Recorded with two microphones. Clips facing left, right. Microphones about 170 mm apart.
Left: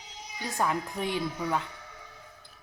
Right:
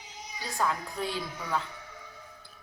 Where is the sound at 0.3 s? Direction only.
20° left (ahead or behind).